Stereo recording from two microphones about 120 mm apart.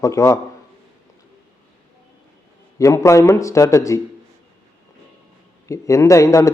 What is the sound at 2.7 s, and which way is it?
A man's voice, 25° left (ahead or behind).